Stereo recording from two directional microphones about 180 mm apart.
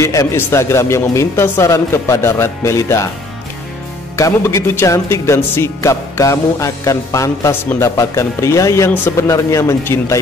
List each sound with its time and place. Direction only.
0.0 s speech: 15° left (ahead or behind)
4.2 s speech: 15° left (ahead or behind)